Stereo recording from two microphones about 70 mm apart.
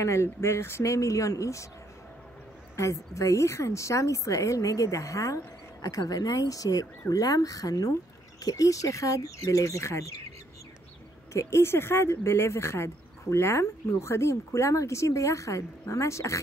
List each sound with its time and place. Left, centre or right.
0.0 s speech: left
2.7 s speech: left
11.3 s speech: left